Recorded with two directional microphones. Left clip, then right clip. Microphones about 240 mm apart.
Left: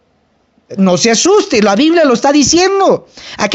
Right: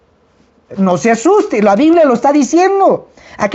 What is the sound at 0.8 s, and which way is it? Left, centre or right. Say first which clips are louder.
Speech: left 1 dB; left.